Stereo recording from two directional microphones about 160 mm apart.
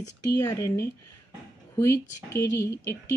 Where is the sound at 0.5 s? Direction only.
20° left (ahead or behind).